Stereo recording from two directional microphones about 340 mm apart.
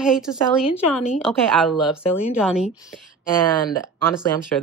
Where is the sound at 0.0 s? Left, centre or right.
Centre.